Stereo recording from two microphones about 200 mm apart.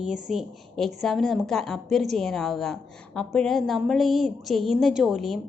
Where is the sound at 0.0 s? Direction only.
Centre (ahead or behind).